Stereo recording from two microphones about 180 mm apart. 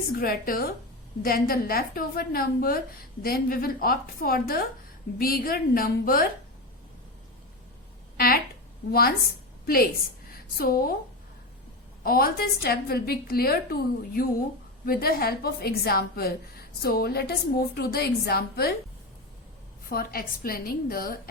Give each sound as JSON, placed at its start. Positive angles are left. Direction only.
{"t": 0.1, "sound": "a woman's voice", "side_deg": 55}
{"t": 8.1, "sound": "a sound", "side_deg": 55}
{"t": 8.9, "sound": "a woman's voice", "side_deg": 55}
{"t": 10.6, "sound": "a woman's voice", "side_deg": 60}
{"t": 12.0, "sound": "a woman's voice", "side_deg": 55}
{"t": 19.9, "sound": "a woman's voice", "side_deg": 55}